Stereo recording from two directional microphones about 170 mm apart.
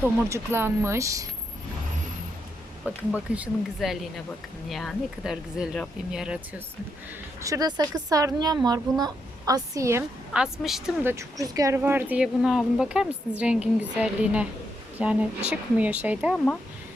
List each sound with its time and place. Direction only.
0.0 s speech: 15° right (ahead or behind)
2.8 s speech: 10° right (ahead or behind)
7.4 s a woman's voice: 20° right (ahead or behind)
10.3 s speech: 5° right (ahead or behind)
11.0 s speech: 15° right (ahead or behind)